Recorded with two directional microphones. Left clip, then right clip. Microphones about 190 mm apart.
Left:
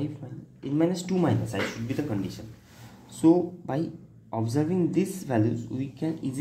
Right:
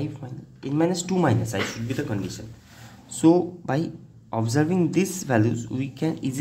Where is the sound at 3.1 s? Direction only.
30° right (ahead or behind).